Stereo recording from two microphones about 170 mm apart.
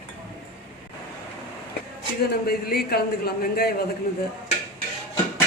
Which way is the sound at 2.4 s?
65° left (ahead or behind).